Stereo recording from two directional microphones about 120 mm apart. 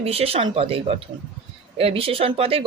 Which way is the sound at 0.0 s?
55° right (ahead or behind).